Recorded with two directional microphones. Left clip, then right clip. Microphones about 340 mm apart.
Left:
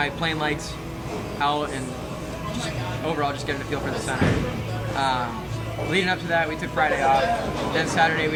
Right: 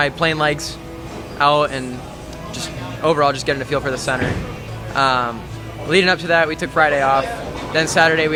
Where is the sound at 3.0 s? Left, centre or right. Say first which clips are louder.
Right 11 dB; right.